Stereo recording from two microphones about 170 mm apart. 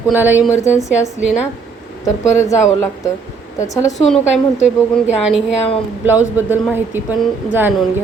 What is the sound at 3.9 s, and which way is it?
A woman's voice, centre (ahead or behind).